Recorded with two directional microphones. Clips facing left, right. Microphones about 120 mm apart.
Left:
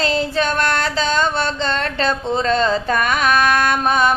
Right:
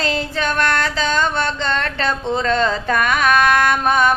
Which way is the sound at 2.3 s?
30° left (ahead or behind).